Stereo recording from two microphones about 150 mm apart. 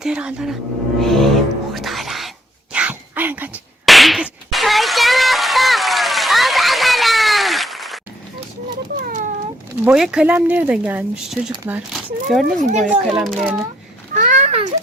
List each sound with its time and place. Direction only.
0.0 s speech: 5° right (ahead or behind)
0.9 s music: centre (ahead or behind)
2.7 s dog: 10° right (ahead or behind)
3.8 s whip: centre (ahead or behind)
9.0 s cat: 75° right (ahead or behind)
9.8 s speech: 5° right (ahead or behind)
12.5 s speech: 55° right (ahead or behind)
12.9 s speech: 5° right (ahead or behind)
14.1 s a sound: 55° right (ahead or behind)